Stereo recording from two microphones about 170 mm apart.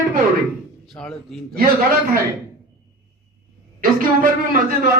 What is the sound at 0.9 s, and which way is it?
Speech, 5° left (ahead or behind).